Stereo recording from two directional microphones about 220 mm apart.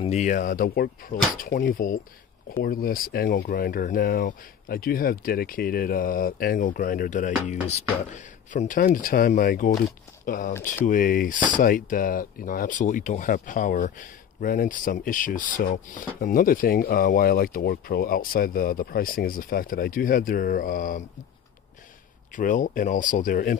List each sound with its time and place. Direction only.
0.0 s speech: 30° left (ahead or behind)
22.3 s speech: 35° left (ahead or behind)